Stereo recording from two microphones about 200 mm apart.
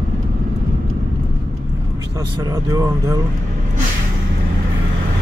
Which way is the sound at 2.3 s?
20° right (ahead or behind).